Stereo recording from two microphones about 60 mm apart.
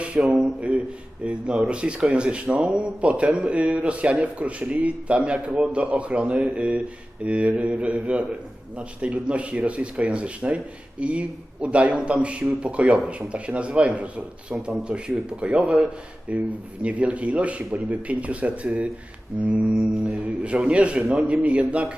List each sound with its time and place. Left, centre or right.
0.1 s speech: centre